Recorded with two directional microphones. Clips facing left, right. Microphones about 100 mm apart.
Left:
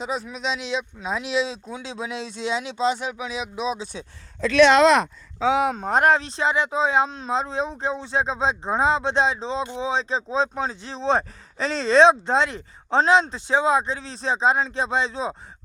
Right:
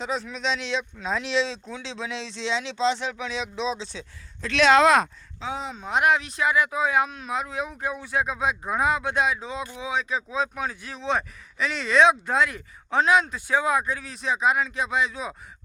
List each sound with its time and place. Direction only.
0.0 s speech: 5° left (ahead or behind)
5.5 s speech: 70° left (ahead or behind)
5.7 s speech: 45° left (ahead or behind); by 15.4 s 30° left (ahead or behind)